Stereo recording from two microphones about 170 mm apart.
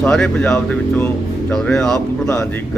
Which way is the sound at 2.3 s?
15° left (ahead or behind).